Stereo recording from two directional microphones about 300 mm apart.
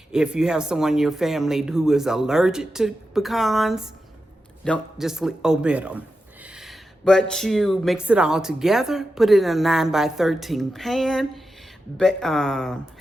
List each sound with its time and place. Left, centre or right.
0.1 s speech: centre